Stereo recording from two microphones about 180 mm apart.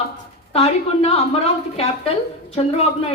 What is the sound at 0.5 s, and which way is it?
A woman's voice, 35° left (ahead or behind).